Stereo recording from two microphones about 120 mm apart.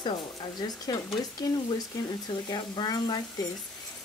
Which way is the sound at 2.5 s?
35° left (ahead or behind).